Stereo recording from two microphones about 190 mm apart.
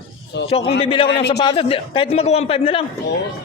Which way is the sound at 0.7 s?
30° left (ahead or behind).